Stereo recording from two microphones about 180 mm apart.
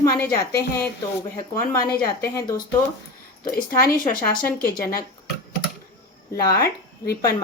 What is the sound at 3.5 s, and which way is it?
Speech, 55° left (ahead or behind).